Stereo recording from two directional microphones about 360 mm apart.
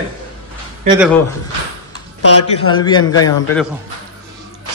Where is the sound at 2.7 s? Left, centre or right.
Centre.